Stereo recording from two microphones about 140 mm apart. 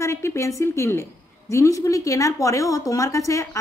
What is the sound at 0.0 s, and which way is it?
A woman's voice, 20° left (ahead or behind).